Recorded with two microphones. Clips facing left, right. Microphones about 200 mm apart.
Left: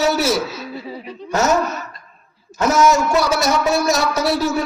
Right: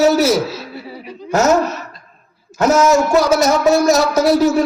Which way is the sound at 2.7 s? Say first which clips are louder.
Right 3 dB; 40° right (ahead or behind).